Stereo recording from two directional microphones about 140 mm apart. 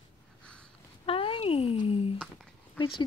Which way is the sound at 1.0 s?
40° left (ahead or behind).